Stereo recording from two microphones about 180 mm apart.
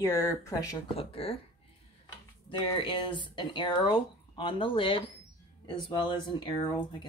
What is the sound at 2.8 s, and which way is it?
Speech, 25° left (ahead or behind).